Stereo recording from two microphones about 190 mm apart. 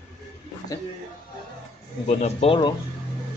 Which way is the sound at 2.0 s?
35° left (ahead or behind).